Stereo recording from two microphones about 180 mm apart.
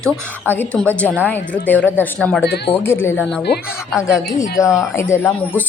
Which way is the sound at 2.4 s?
65° left (ahead or behind).